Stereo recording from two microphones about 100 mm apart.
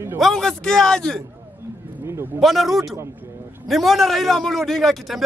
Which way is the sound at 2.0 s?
25° right (ahead or behind).